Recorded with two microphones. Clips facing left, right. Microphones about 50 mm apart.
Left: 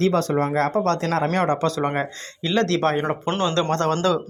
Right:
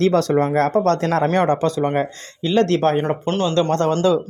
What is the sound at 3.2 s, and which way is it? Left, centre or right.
Speech, centre.